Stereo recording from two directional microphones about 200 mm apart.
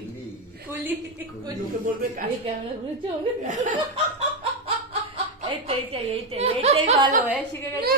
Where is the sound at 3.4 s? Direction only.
40° right (ahead or behind).